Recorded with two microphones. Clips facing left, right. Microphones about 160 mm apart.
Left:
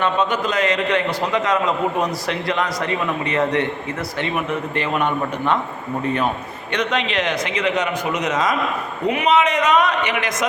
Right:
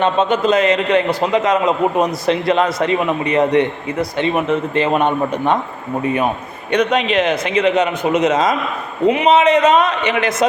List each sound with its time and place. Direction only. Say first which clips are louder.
0.0 s a man's voice: right 5 dB; 25° right (ahead or behind)
6.7 s a man's voice: right 7 dB; 20° right (ahead or behind)